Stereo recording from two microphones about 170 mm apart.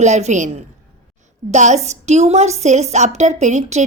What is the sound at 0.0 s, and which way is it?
A woman's voice, 45° right (ahead or behind).